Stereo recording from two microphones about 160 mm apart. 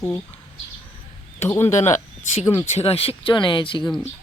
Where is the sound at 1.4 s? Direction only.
15° left (ahead or behind).